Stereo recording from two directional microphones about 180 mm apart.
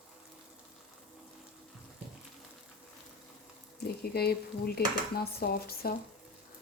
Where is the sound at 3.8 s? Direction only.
60° left (ahead or behind).